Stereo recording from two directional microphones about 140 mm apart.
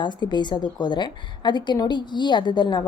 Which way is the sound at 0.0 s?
30° left (ahead or behind).